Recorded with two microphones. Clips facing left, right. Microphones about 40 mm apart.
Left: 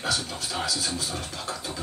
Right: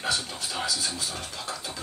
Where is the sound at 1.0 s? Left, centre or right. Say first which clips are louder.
Left 2 dB; left.